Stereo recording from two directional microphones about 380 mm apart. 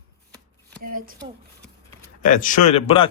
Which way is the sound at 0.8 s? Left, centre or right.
Right.